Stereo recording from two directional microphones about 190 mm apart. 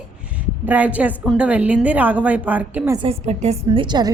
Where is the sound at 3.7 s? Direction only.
25° right (ahead or behind).